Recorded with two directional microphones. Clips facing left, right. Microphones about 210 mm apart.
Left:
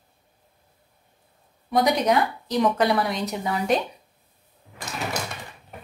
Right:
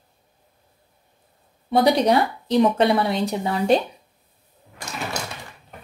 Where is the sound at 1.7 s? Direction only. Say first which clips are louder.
Right 3 dB; 30° right (ahead or behind).